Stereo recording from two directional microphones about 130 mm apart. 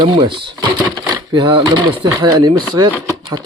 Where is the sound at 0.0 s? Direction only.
35° right (ahead or behind).